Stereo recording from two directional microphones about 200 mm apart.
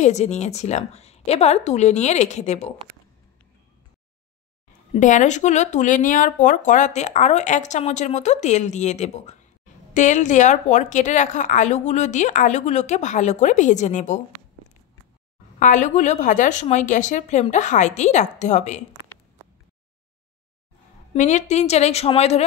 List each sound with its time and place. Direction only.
0.0 s speech: 35° left (ahead or behind)
4.9 s speech: 35° left (ahead or behind)
15.6 s speech: 35° left (ahead or behind)
21.1 s speech: 35° left (ahead or behind)